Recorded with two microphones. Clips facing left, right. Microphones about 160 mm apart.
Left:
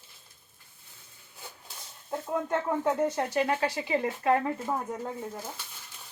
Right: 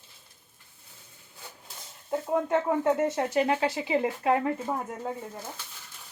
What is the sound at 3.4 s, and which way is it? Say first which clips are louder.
Speech: right 2 dB; 25° right (ahead or behind).